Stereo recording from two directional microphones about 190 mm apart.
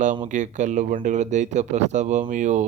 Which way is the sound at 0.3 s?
40° right (ahead or behind).